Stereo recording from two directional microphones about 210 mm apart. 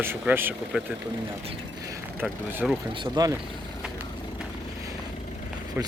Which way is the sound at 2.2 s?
5° right (ahead or behind).